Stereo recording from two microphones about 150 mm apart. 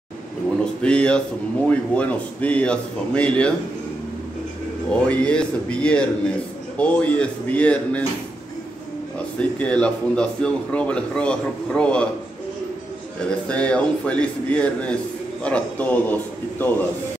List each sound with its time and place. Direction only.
0.8 s speech: 5° left (ahead or behind)
5.0 s speech: 10° left (ahead or behind)
9.4 s speech: 10° left (ahead or behind)
13.5 s speech: 10° left (ahead or behind)